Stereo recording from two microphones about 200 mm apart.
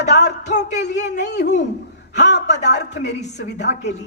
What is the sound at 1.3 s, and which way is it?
A woman's voice, 60° left (ahead or behind).